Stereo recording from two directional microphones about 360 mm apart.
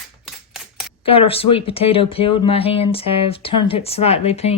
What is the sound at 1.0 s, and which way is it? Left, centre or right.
Speech, centre.